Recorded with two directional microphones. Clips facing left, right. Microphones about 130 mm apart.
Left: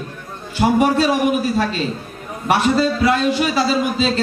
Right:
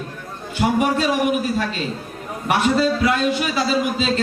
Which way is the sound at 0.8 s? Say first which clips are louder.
Left 4 dB; 30° left (ahead or behind).